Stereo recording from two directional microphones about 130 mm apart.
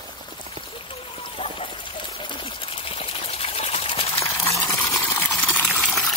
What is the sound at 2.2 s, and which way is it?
Water, 40° left (ahead or behind).